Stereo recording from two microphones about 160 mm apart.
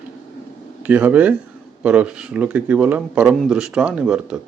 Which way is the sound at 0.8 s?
10° right (ahead or behind).